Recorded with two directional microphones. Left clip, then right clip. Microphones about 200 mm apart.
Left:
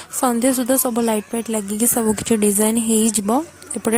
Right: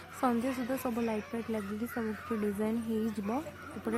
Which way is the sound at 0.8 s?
45° left (ahead or behind).